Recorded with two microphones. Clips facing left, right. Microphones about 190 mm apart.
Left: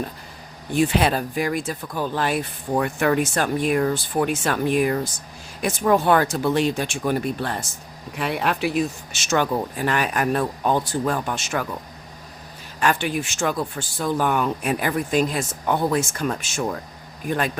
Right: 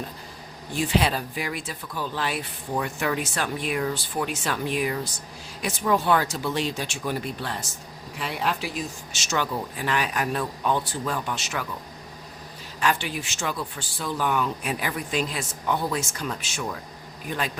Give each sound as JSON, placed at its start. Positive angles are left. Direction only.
{"t": 0.8, "sound": "speech", "side_deg": 55}
{"t": 12.8, "sound": "speech", "side_deg": 50}